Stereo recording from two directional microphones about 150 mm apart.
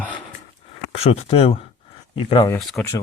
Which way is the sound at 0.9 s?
45° left (ahead or behind).